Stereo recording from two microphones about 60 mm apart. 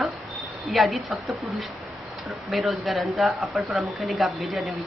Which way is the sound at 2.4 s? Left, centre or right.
Centre.